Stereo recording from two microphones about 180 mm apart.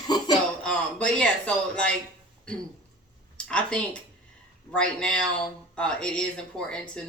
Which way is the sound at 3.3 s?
5° left (ahead or behind).